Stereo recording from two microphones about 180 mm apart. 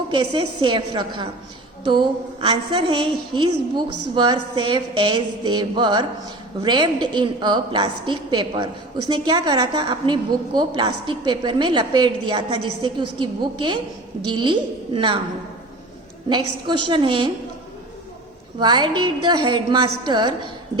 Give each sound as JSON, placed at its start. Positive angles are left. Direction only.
{"t": 0.1, "sound": "a woman's voice", "side_deg": -25}
{"t": 16.3, "sound": "a woman's voice", "side_deg": -25}
{"t": 18.6, "sound": "a woman's voice", "side_deg": -25}